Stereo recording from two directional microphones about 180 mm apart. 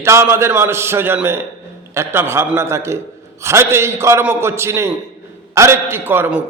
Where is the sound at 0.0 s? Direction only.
15° right (ahead or behind).